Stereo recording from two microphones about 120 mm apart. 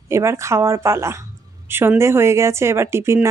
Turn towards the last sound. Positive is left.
turn(degrees=-20)  # may be behind; listen again after turning